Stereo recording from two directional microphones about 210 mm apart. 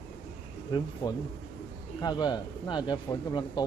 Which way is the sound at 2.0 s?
20° left (ahead or behind).